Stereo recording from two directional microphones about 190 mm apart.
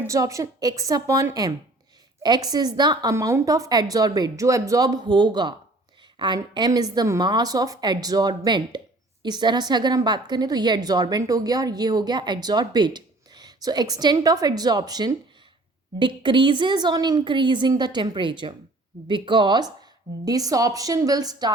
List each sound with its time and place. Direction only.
0.0 s a woman's voice: 15° right (ahead or behind)